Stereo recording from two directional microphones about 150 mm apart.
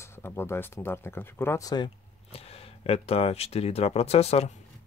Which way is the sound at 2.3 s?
40° left (ahead or behind).